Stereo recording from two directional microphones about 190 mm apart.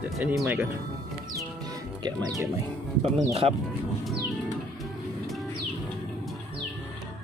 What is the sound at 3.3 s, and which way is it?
Speech, 30° right (ahead or behind).